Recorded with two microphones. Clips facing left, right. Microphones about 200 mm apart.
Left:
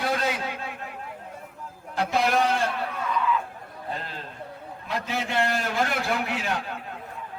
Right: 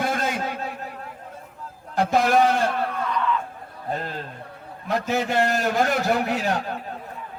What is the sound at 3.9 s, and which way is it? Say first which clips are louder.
A man's voice: right 6 dB; 45° right (ahead or behind).